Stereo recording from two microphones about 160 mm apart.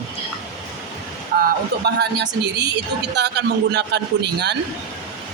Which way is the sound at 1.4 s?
90° right.